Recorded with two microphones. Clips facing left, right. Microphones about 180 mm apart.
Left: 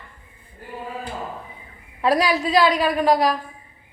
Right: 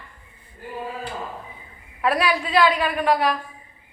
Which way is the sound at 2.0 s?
35° left (ahead or behind).